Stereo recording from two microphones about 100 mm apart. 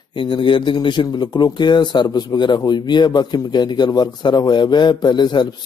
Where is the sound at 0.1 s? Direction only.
55° left (ahead or behind).